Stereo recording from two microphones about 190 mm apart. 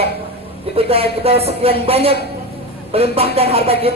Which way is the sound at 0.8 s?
30° right (ahead or behind).